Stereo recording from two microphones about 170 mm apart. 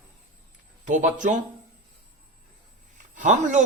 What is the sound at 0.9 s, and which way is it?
Speech, 45° right (ahead or behind).